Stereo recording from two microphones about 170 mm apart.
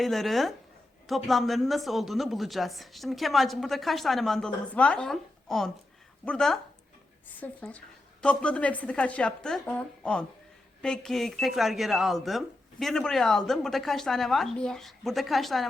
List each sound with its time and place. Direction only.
0.0 s a woman's voice: centre (ahead or behind)